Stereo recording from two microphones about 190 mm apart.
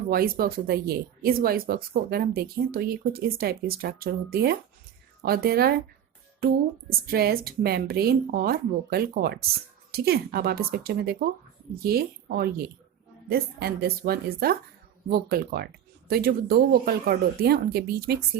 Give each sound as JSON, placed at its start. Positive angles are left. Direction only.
{"t": 0.1, "sound": "a woman's voice", "side_deg": -50}